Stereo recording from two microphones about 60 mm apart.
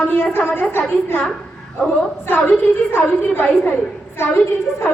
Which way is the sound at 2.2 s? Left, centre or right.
Left.